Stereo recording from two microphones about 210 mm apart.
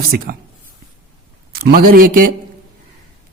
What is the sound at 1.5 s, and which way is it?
Speech, 45° right (ahead or behind).